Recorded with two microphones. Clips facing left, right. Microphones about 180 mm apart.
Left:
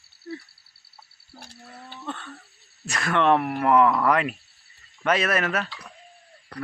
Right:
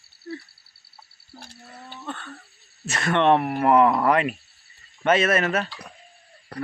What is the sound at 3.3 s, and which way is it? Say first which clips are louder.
Speech: right 2 dB; 35° right (ahead or behind).